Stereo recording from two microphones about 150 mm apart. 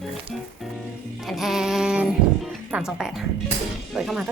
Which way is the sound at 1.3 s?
Centre (ahead or behind).